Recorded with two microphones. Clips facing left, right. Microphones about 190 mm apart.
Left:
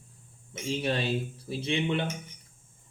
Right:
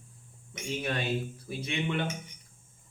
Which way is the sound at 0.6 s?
30° left (ahead or behind).